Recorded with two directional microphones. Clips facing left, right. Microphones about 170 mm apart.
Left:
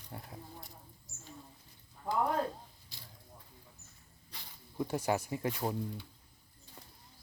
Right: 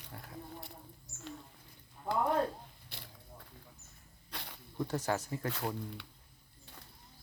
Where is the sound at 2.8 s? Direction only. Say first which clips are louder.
Right 4 dB; 65° right (ahead or behind).